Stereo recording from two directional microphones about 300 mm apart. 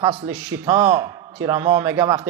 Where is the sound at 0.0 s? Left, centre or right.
Centre.